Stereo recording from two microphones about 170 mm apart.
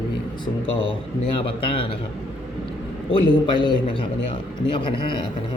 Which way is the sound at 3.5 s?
30° left (ahead or behind).